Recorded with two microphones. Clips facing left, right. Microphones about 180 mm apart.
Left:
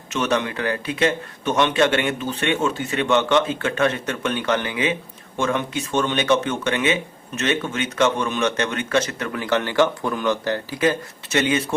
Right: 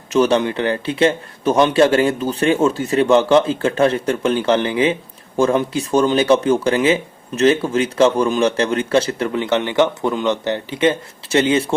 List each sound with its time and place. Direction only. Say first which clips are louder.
0.1 s speech: right 7 dB; 30° right (ahead or behind)